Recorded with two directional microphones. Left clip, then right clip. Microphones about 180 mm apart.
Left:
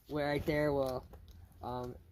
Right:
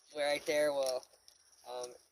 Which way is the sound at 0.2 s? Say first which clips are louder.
Right 2 dB; 20° right (ahead or behind).